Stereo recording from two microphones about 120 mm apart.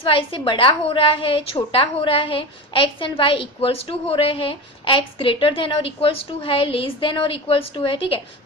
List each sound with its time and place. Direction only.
0.0 s a woman's voice: 50° left (ahead or behind)